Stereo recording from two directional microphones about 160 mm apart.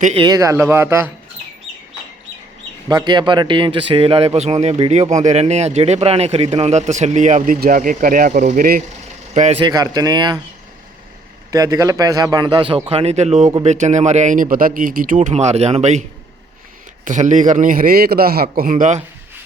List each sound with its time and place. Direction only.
0.2 s speech: 20° right (ahead or behind)
2.9 s a man's voice: 30° right (ahead or behind); by 8.8 s 60° right (ahead or behind)
9.3 s a man's voice: 45° right (ahead or behind)
9.6 s a man's voice: 25° right (ahead or behind)
11.5 s a man's voice: 20° right (ahead or behind); by 14.4 s 50° right (ahead or behind)
14.5 s speech: 60° right (ahead or behind)
17.1 s a man's voice: 50° right (ahead or behind)